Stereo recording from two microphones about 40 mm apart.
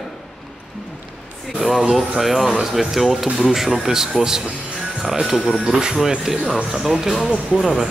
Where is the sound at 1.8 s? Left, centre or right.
Centre.